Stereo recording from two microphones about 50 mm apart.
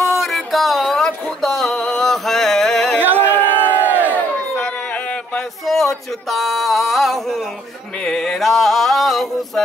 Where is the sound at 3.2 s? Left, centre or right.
Left.